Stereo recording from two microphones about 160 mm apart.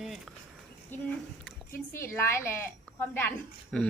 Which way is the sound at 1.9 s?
15° left (ahead or behind).